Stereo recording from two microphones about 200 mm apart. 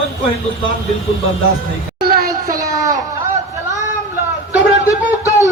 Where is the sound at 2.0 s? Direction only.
50° right (ahead or behind).